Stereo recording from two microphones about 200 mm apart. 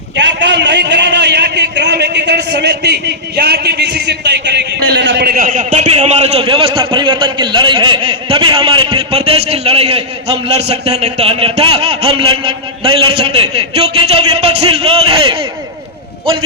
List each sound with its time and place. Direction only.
0.2 s a man's voice: 60° right (ahead or behind); by 15.4 s 30° right (ahead or behind)